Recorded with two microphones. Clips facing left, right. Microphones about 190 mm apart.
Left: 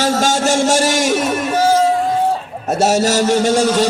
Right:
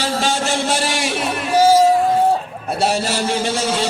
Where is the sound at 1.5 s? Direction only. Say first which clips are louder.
Right 3 dB; 10° right (ahead or behind).